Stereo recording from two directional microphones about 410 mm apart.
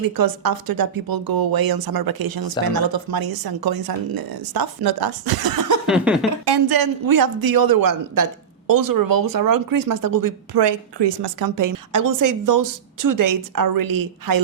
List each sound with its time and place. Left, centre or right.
0.4 s speech: right
5.8 s a sound: centre
6.4 s speech: right
10.6 s speech: right